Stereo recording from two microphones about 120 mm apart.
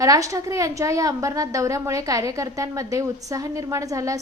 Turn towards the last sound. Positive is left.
turn(degrees=-30)  # may be behind; listen again after turning